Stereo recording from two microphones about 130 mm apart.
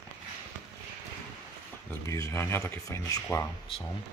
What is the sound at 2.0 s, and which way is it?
Speech, 25° left (ahead or behind).